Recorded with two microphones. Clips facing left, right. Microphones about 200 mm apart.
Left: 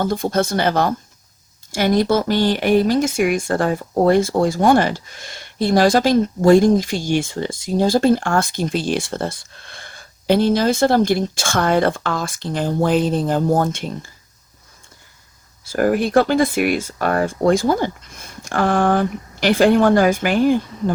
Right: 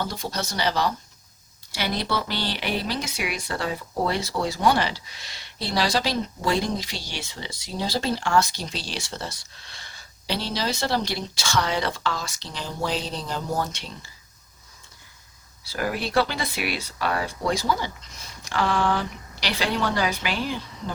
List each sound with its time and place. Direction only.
0.0 s speech: 50° left (ahead or behind)
15.6 s speech: 50° left (ahead or behind)